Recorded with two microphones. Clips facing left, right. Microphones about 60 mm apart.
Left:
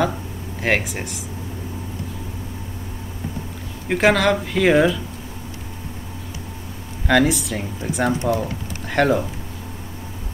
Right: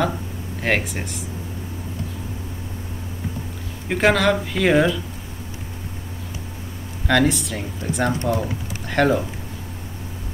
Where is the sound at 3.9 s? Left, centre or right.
Centre.